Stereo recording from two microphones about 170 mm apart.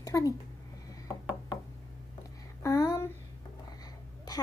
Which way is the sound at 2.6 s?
15° left (ahead or behind).